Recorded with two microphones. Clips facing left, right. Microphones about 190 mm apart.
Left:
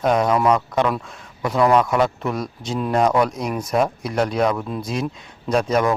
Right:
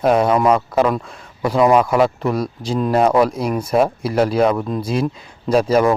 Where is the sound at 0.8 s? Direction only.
15° right (ahead or behind).